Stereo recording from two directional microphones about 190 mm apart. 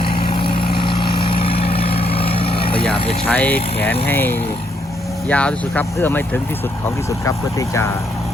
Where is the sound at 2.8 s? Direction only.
5° left (ahead or behind).